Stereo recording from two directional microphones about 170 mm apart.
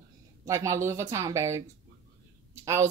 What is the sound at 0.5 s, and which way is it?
A woman's voice, 15° right (ahead or behind).